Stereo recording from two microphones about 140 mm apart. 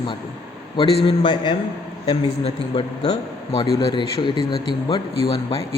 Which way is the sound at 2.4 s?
45° left (ahead or behind).